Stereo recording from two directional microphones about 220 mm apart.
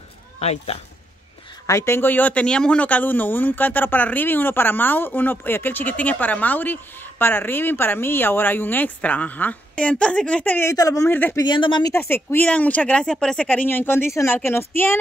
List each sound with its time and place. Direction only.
0.4 s speech: 30° left (ahead or behind)
1.7 s speech: 10° left (ahead or behind)
11.4 s speech: 20° left (ahead or behind)